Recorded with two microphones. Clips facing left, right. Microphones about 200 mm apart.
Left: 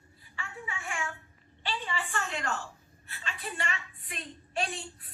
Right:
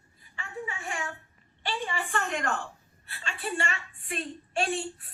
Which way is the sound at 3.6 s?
45° right (ahead or behind).